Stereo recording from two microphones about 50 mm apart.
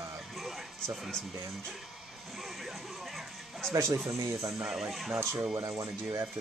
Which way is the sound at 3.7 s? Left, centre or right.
Right.